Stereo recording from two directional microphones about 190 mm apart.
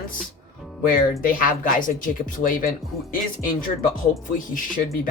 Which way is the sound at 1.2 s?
50° left (ahead or behind).